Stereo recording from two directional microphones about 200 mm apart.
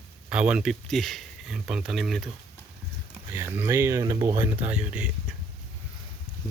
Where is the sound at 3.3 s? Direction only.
10° right (ahead or behind).